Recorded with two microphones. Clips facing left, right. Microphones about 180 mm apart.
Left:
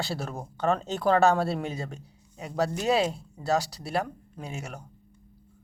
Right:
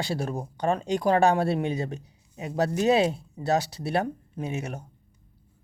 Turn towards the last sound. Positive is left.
turn(degrees=-20)  # may be behind; listen again after turning